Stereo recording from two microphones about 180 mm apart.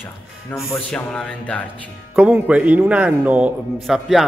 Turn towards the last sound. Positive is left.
turn(degrees=0)  # may be behind; listen again after turning